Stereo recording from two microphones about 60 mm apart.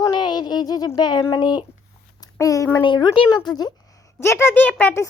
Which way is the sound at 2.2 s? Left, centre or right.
Left.